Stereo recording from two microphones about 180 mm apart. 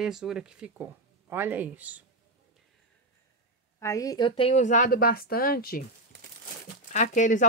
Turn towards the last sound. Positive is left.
turn(degrees=45)  # may be behind; listen again after turning